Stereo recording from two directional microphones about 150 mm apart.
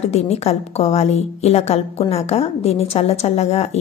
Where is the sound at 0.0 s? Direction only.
45° left (ahead or behind).